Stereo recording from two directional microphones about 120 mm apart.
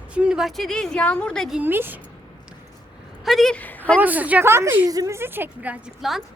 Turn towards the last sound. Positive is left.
turn(degrees=-5)  # may be behind; listen again after turning